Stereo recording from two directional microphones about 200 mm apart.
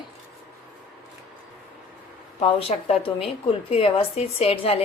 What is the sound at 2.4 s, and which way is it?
A woman's voice, 30° left (ahead or behind).